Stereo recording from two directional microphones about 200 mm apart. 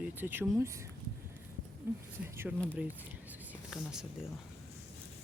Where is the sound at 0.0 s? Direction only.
10° right (ahead or behind).